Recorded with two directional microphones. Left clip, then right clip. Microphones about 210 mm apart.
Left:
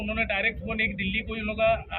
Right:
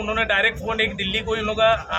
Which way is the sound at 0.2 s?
20° right (ahead or behind).